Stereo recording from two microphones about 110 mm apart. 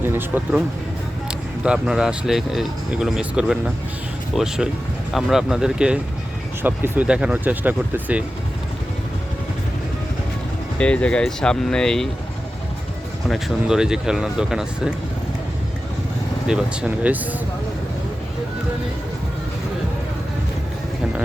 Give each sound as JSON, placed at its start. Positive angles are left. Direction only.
{"t": 0.0, "sound": "speech", "side_deg": -20}
{"t": 1.6, "sound": "speech", "side_deg": -5}
{"t": 6.6, "sound": "speech", "side_deg": -20}
{"t": 10.8, "sound": "speech", "side_deg": 10}
{"t": 13.2, "sound": "speech", "side_deg": -5}
{"t": 16.5, "sound": "speech", "side_deg": -10}